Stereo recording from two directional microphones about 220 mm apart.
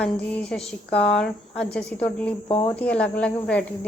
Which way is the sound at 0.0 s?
5° left (ahead or behind).